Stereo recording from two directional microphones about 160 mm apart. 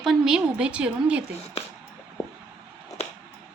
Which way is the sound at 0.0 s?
Centre (ahead or behind).